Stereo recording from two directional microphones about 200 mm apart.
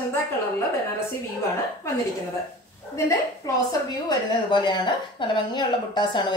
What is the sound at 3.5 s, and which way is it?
A woman's voice, 20° left (ahead or behind).